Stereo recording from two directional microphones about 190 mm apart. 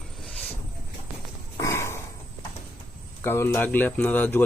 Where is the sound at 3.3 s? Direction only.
15° left (ahead or behind).